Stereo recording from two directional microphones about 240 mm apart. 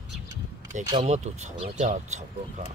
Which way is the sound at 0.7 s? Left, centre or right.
Right.